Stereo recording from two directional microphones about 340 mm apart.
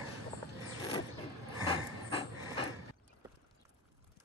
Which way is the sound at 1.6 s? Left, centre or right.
Centre.